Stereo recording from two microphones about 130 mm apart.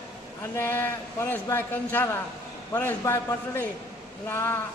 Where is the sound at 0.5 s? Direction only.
15° left (ahead or behind).